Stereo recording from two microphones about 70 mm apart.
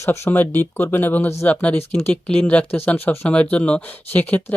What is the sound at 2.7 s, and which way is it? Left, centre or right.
Speech, left.